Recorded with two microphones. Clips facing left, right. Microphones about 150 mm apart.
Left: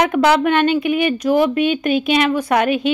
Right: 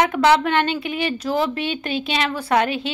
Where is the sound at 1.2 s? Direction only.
15° left (ahead or behind).